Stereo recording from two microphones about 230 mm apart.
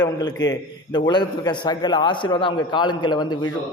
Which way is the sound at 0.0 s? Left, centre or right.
Centre.